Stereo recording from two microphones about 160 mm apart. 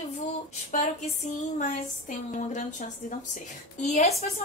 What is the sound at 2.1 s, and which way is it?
A woman's voice, 50° left (ahead or behind).